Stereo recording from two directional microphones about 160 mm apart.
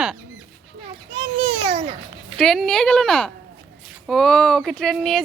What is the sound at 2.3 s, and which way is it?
Speech, 5° left (ahead or behind).